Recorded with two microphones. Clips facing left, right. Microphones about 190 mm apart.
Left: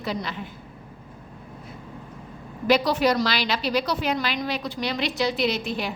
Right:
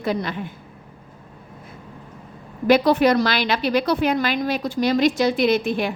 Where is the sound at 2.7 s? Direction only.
55° right (ahead or behind).